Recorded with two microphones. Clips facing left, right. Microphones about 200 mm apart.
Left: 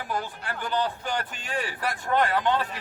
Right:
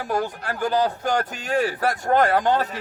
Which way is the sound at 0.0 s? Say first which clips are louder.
Right 7 dB; 45° right (ahead or behind).